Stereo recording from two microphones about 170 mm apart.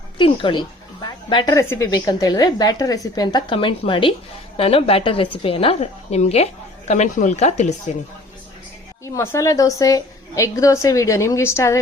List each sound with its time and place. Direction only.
0.2 s a woman's voice: 30° left (ahead or behind); by 7.8 s 45° left (ahead or behind)
9.1 s a woman's voice: 15° left (ahead or behind)